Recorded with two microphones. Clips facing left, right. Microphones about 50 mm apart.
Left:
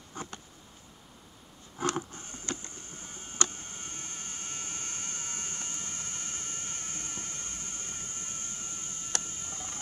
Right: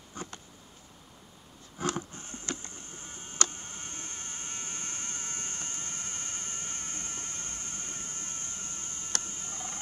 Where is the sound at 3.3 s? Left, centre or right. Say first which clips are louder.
Even; centre.